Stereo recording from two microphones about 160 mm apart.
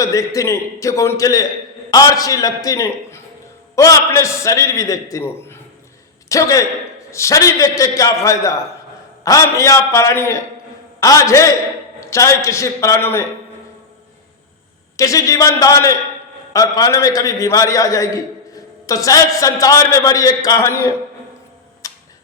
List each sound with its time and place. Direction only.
0.0 s a man's voice: 20° left (ahead or behind)
14.9 s a man's voice: 20° left (ahead or behind)
21.8 s tick-tock: 20° left (ahead or behind)